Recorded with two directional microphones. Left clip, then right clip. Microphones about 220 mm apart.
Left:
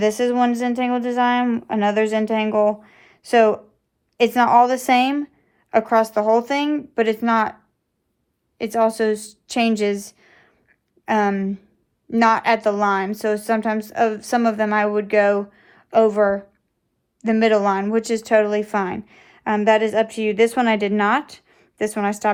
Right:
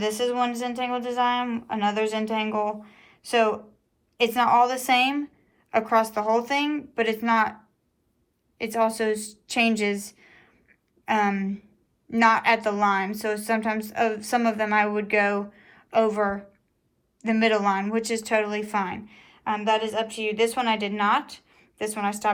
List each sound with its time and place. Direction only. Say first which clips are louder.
0.0 s speech: left 6 dB; 20° left (ahead or behind)
8.5 s a woman's voice: left 5 dB; 15° left (ahead or behind)